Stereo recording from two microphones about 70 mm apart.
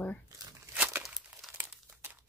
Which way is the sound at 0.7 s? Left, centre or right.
Right.